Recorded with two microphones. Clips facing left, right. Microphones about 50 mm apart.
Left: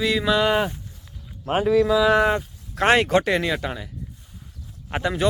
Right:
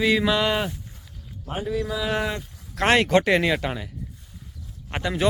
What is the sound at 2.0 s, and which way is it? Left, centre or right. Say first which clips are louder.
Speech: left 8 dB; left.